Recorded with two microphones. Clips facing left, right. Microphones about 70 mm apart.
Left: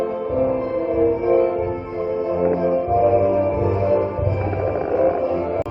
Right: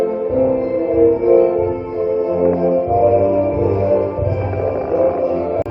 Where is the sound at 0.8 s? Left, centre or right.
Right.